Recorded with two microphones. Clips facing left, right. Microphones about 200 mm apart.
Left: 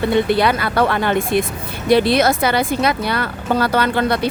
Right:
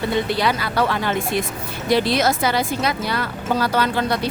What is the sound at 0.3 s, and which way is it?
Speech, 60° left (ahead or behind).